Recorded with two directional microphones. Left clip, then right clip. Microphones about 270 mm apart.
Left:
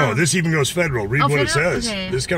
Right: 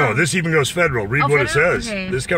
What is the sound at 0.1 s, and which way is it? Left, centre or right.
A man's voice, centre.